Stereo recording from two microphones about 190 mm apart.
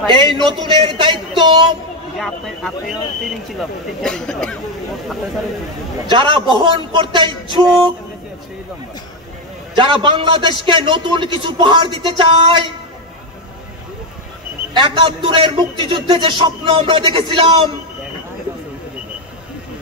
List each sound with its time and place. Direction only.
0.0 s a man's voice: 25° right (ahead or behind)
2.1 s speech: centre (ahead or behind)
4.0 s speech: 5° left (ahead or behind)
6.0 s a man's voice: 25° right (ahead or behind)
9.8 s a man's voice: 25° right (ahead or behind)
14.7 s a man's voice: 25° right (ahead or behind)